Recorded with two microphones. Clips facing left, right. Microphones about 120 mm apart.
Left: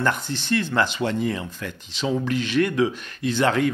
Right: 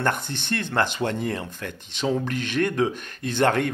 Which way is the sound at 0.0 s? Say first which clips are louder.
Left 1 dB; 50° right (ahead or behind).